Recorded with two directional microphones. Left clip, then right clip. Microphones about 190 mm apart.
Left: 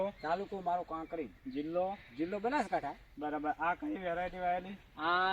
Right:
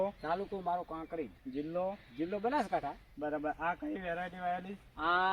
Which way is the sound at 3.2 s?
5° right (ahead or behind).